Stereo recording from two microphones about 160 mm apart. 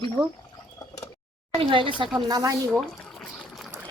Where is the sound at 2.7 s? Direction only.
5° left (ahead or behind).